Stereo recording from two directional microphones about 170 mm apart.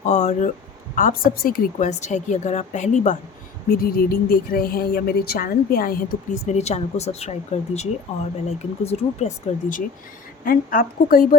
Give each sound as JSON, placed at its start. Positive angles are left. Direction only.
{"t": 0.0, "sound": "speech", "side_deg": 45}
{"t": 0.9, "sound": "a woman's voice", "side_deg": 55}
{"t": 3.7, "sound": "speech", "side_deg": 60}
{"t": 6.4, "sound": "speech", "side_deg": 40}